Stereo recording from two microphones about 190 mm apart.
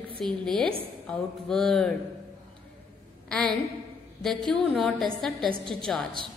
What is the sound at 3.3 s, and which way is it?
A woman's voice, 5° left (ahead or behind).